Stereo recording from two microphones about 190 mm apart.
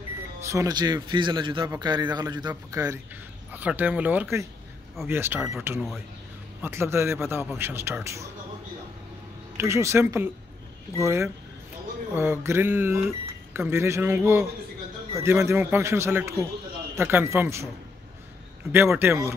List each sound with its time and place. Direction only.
0.4 s a man's voice: 15° right (ahead or behind)
9.6 s a man's voice: 15° right (ahead or behind)
18.7 s a man's voice: 10° right (ahead or behind)